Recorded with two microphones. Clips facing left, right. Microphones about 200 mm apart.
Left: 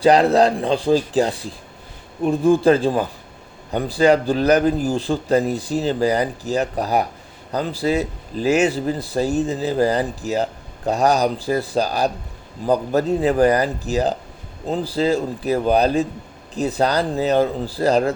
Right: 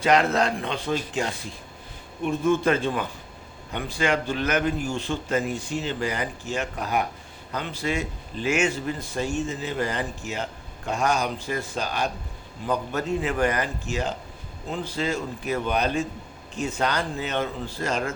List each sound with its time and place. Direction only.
0.0 s speech: 35° left (ahead or behind)